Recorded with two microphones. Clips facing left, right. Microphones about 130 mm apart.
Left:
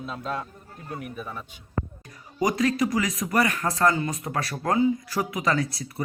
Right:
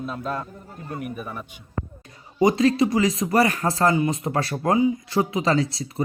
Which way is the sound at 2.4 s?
30° right (ahead or behind).